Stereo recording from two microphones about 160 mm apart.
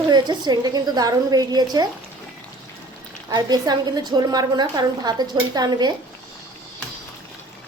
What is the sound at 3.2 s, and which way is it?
A woman's voice, 25° right (ahead or behind).